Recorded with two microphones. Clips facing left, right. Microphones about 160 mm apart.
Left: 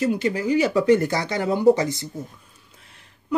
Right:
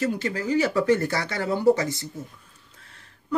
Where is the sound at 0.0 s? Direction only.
15° left (ahead or behind).